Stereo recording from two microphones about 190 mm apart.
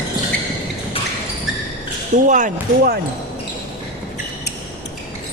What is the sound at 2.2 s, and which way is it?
Speech, 40° right (ahead or behind).